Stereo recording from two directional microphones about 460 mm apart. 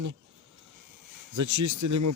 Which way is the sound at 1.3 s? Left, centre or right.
Right.